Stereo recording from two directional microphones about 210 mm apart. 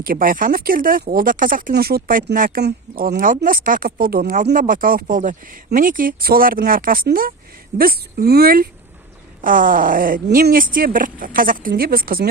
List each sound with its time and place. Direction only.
0.0 s speech: 45° right (ahead or behind)